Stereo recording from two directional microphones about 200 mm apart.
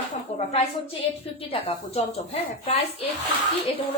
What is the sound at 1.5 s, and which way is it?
Speech, 30° left (ahead or behind).